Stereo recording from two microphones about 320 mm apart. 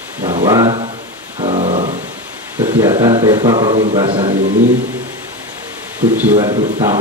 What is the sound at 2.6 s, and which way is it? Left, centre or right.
Speech, centre.